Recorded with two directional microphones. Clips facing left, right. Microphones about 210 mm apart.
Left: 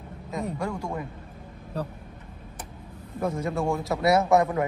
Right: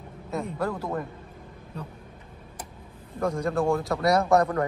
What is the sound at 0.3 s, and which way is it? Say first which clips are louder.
Speech: right 1 dB; 5° right (ahead or behind).